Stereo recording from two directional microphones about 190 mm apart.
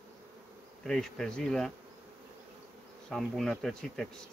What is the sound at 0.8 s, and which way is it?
Speech, 5° left (ahead or behind).